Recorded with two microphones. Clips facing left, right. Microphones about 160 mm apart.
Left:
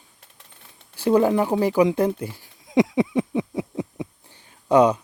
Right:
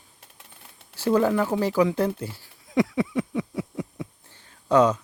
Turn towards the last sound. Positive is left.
turn(degrees=15)  # may be behind; listen again after turning